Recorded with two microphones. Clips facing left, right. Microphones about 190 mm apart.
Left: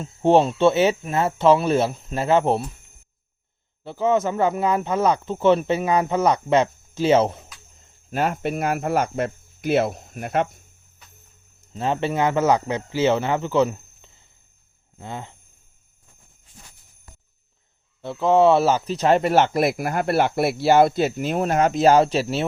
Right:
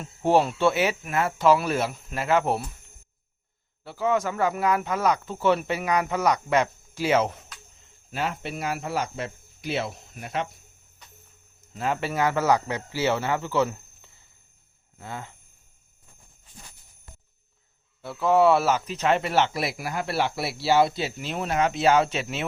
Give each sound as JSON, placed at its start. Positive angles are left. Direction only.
{"t": 0.0, "sound": "speech", "side_deg": 25}
{"t": 3.8, "sound": "speech", "side_deg": 25}
{"t": 8.1, "sound": "speech", "side_deg": 50}
{"t": 11.7, "sound": "speech", "side_deg": 25}
{"t": 18.0, "sound": "speech", "side_deg": 20}